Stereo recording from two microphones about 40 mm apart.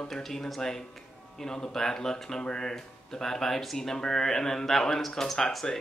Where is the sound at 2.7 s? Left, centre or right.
Centre.